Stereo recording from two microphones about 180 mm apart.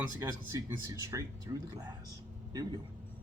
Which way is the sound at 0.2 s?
15° right (ahead or behind).